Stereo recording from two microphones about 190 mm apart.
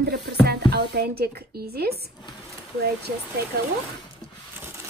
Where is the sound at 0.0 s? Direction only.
60° right (ahead or behind).